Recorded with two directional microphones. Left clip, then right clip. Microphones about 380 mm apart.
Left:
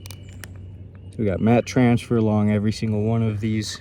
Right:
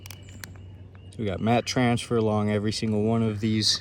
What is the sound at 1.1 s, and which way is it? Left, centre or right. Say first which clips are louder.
Speech: left 5 dB; centre.